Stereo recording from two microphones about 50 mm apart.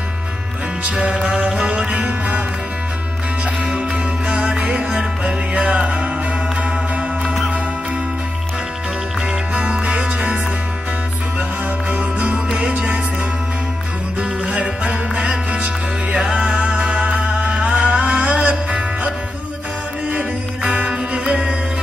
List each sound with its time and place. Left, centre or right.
0.8 s music: centre
1.9 s music: right
3.7 s music: right
7.2 s music: centre
9.5 s music: centre
11.9 s music: right
14.5 s music: right